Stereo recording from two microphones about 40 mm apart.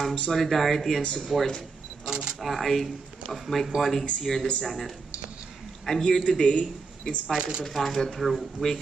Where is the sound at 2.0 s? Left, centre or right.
Right.